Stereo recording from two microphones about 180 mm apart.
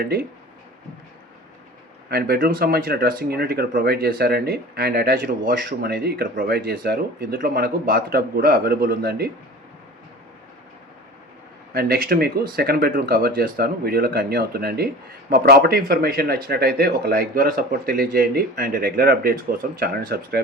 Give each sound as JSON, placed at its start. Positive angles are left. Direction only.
{"t": 0.0, "sound": "speech", "side_deg": -60}
{"t": 2.0, "sound": "speech", "side_deg": -60}
{"t": 11.7, "sound": "speech", "side_deg": -55}